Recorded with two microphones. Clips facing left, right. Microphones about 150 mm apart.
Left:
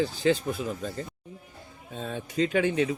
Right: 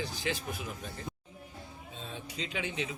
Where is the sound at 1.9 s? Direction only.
55° left (ahead or behind).